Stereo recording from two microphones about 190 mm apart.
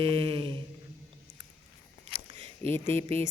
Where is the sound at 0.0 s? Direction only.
30° right (ahead or behind).